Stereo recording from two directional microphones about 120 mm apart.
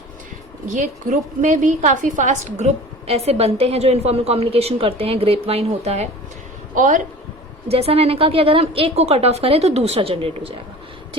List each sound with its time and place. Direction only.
1.4 s a woman's voice: 90° right; by 6.1 s 60° right (ahead or behind)
6.7 s speech: 90° right
7.7 s a woman's voice: 55° right (ahead or behind)